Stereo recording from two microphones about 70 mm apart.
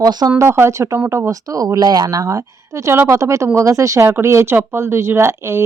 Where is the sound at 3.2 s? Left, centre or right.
Right.